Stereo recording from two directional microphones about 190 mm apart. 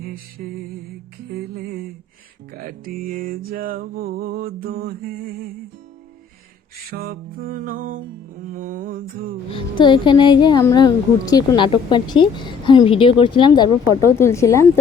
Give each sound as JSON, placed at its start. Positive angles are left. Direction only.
{"t": 0.0, "sound": "music", "side_deg": -50}
{"t": 6.9, "sound": "music", "side_deg": -50}
{"t": 9.5, "sound": "a woman's voice", "side_deg": 25}